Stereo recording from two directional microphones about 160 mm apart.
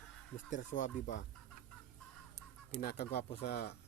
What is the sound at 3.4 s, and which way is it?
Speech, 70° left (ahead or behind).